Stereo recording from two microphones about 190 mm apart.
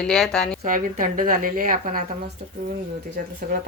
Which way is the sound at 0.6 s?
45° right (ahead or behind).